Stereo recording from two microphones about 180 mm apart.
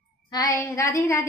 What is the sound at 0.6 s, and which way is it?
Speech, 15° left (ahead or behind).